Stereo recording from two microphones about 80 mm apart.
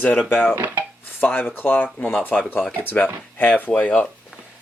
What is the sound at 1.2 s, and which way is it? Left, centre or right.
Speech, left.